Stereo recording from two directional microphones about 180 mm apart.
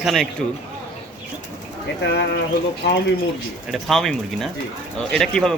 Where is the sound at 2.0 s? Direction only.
70° left (ahead or behind).